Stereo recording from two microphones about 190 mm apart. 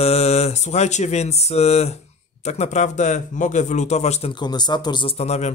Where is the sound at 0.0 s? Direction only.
35° left (ahead or behind).